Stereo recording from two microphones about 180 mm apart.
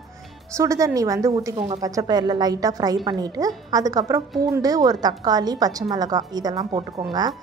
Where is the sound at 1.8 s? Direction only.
20° right (ahead or behind).